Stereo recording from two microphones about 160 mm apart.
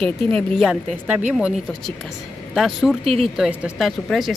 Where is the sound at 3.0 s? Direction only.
40° right (ahead or behind).